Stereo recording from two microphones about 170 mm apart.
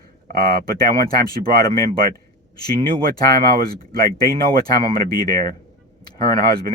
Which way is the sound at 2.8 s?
60° right (ahead or behind).